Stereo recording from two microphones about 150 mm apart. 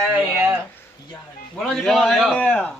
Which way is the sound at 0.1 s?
15° right (ahead or behind).